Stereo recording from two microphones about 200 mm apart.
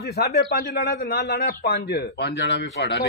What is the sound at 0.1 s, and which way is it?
A man's voice, 55° left (ahead or behind).